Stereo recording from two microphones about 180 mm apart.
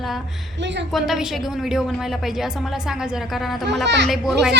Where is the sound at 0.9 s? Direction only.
Centre (ahead or behind).